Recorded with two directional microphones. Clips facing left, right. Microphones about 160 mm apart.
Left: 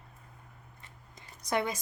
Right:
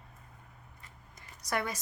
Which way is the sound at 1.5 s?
20° left (ahead or behind).